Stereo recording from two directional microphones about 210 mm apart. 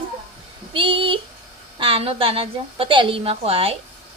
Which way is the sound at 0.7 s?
25° right (ahead or behind).